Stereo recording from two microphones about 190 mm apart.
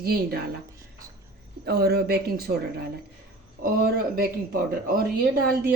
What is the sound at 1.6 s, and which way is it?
Speech, 55° right (ahead or behind).